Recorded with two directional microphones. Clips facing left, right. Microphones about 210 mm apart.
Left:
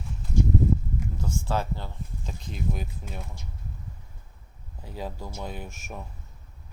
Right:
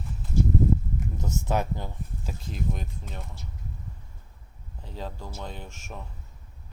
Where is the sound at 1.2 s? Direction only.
20° right (ahead or behind).